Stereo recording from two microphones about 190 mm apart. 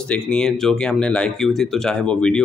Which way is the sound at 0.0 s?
5° left (ahead or behind).